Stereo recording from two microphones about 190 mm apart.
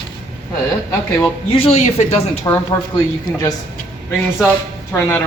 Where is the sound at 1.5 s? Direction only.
30° left (ahead or behind).